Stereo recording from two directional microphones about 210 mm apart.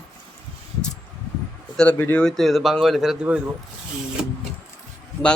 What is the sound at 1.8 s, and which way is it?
Speech, 10° left (ahead or behind).